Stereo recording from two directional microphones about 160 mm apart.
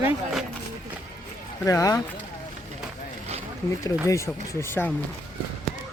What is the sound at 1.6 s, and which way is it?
Speech, 20° left (ahead or behind).